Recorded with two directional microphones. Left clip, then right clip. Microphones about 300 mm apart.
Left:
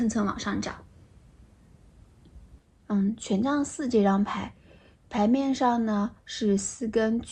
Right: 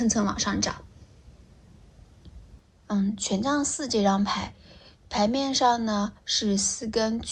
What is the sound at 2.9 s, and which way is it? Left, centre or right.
A woman's voice, right.